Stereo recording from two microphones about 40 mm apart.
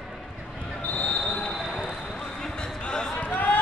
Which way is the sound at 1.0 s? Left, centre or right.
Centre.